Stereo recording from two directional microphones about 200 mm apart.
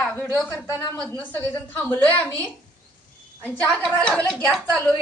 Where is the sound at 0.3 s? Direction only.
10° left (ahead or behind).